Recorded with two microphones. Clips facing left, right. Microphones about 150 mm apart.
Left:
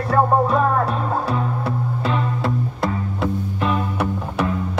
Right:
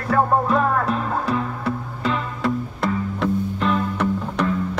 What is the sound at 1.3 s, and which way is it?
Music, 30° left (ahead or behind).